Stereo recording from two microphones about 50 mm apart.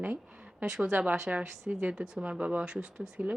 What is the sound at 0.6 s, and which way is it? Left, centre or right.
Speech, centre.